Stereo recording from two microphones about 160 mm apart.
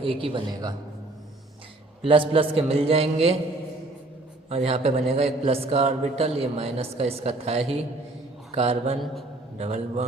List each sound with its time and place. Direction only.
0.0 s a man's voice: 35° right (ahead or behind)
2.0 s a man's voice: 35° right (ahead or behind)
4.4 s a man's voice: 40° right (ahead or behind)